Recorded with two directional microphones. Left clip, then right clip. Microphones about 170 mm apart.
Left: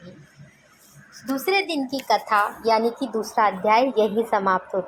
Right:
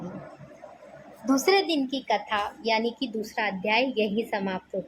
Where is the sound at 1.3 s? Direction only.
30° left (ahead or behind).